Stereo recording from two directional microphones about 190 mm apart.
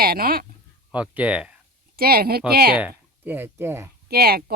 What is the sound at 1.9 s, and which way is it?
Speech, 50° right (ahead or behind).